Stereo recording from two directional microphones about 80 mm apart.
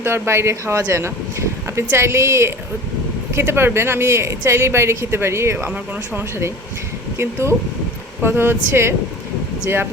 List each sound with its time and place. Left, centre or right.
0.0 s a woman's voice: right